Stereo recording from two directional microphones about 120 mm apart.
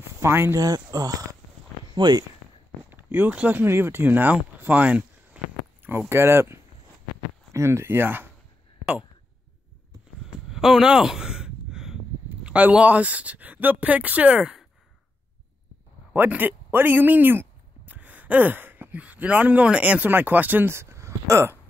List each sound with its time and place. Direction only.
0.2 s speech: 20° right (ahead or behind); by 2.2 s 35° right (ahead or behind)
2.9 s speech: 15° right (ahead or behind)
10.5 s a sound: 5° right (ahead or behind)
12.4 s a woman's voice: 10° right (ahead or behind)
16.1 s speech: 15° right (ahead or behind)